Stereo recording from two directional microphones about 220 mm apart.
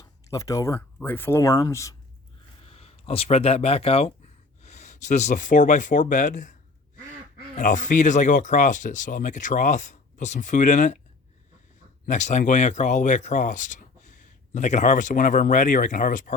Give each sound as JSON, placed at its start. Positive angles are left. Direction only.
{"t": 0.0, "sound": "speech", "side_deg": 15}
{"t": 2.6, "sound": "speech", "side_deg": 25}
{"t": 7.5, "sound": "speech", "side_deg": 35}
{"t": 12.0, "sound": "speech", "side_deg": 30}